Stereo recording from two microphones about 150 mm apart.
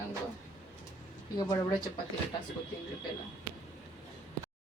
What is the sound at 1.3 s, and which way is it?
Speech, 25° left (ahead or behind).